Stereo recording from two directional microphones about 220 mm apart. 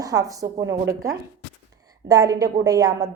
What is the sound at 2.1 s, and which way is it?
A woman's voice, 15° right (ahead or behind).